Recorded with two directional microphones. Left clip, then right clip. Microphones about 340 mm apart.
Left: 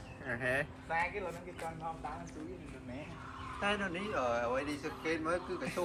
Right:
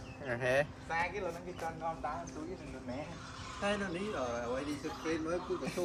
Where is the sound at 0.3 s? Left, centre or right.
Right.